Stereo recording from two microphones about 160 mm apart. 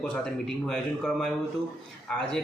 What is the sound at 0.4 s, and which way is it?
A man's voice, centre (ahead or behind).